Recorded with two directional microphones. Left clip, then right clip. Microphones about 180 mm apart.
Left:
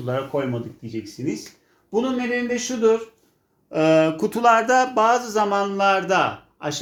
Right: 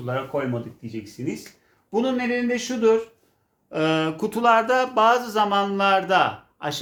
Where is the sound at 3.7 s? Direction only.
30° left (ahead or behind).